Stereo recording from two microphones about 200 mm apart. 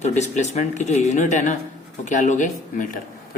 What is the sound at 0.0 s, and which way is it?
Speech, 35° left (ahead or behind).